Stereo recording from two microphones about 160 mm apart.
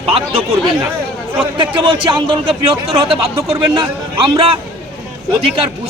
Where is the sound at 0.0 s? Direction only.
35° right (ahead or behind).